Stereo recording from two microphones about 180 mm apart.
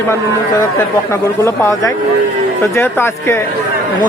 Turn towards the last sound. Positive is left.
turn(degrees=10)  # may be behind; listen again after turning